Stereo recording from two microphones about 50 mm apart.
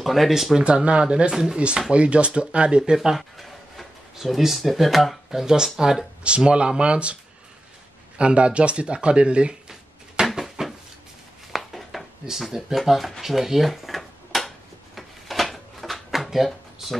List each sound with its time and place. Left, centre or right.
0.0 s speech: centre
0.6 s speech: centre
1.9 s speech: right
2.9 s speech: centre
3.2 s speech: centre
5.4 s speech: centre
6.2 s speech: right
8.2 s speech: centre
10.2 s a sound: centre
12.3 s speech: centre
13.2 s drawer open or close: centre
15.0 s a sound: centre